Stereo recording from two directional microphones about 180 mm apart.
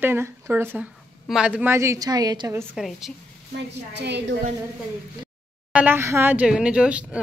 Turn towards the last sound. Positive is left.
turn(degrees=-5)  # may be behind; listen again after turning